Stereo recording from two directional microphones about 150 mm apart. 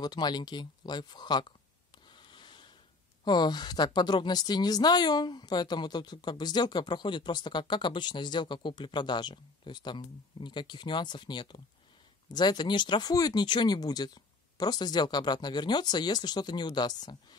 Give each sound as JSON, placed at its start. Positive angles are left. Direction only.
{"t": 0.0, "sound": "speech", "side_deg": 25}
{"t": 2.0, "sound": "a sound", "side_deg": 30}
{"t": 3.3, "sound": "speech", "side_deg": 30}